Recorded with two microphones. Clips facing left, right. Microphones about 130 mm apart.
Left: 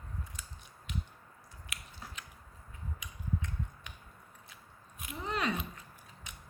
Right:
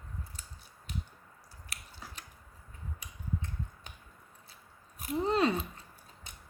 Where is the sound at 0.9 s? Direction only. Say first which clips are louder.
Even; 35° right (ahead or behind).